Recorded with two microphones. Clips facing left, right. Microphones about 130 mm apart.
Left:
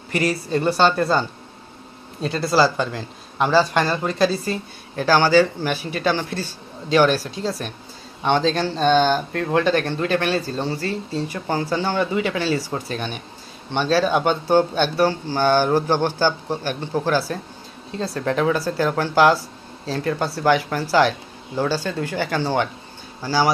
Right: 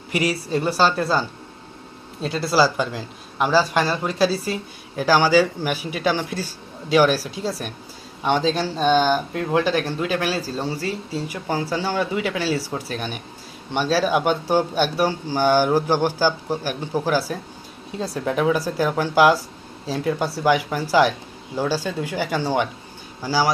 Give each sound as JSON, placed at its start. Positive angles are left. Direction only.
{"t": 0.1, "sound": "speech", "side_deg": -10}
{"t": 2.2, "sound": "a man's voice", "side_deg": -5}